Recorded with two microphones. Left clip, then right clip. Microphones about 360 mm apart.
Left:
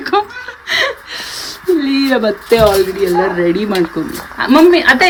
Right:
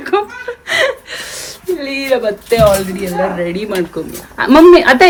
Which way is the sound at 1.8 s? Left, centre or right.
Centre.